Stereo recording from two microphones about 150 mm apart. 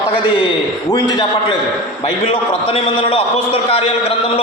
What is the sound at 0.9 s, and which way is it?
A man's voice, 30° left (ahead or behind).